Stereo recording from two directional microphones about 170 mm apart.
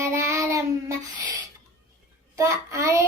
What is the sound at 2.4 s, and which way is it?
Child singing, 15° right (ahead or behind).